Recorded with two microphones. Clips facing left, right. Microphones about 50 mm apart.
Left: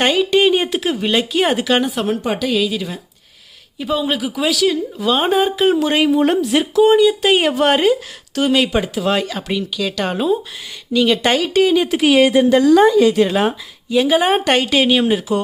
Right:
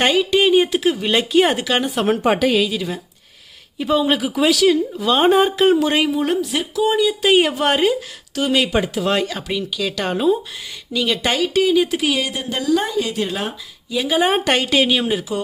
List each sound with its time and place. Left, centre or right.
0.0 s speech: centre
2.0 s a woman's voice: right
2.6 s speech: centre
6.5 s speech: left
6.9 s a woman's voice: centre
7.2 s speech: centre
7.6 s a woman's voice: centre
11.9 s speech: centre
12.1 s speech: left
12.7 s a woman's voice: left
13.1 s speech: left
13.9 s speech: centre
14.2 s a woman's voice: centre